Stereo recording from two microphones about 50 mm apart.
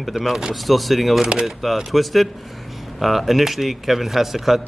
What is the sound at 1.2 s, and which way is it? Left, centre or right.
Speech, centre.